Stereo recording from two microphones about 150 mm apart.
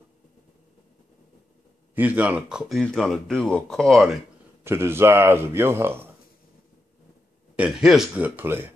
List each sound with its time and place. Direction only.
2.0 s speech: 10° right (ahead or behind)
4.6 s a man's voice: 15° right (ahead or behind)
7.5 s a man's voice: 5° right (ahead or behind)